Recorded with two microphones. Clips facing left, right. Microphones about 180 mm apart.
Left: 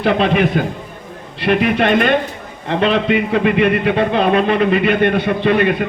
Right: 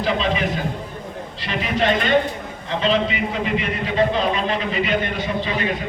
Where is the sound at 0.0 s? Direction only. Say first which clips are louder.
Left 7 dB; 60° left (ahead or behind).